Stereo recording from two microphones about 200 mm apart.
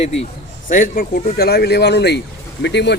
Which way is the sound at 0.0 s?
30° left (ahead or behind).